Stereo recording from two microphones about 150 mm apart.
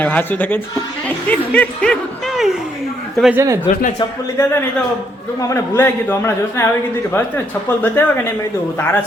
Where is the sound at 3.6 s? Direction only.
60° left (ahead or behind).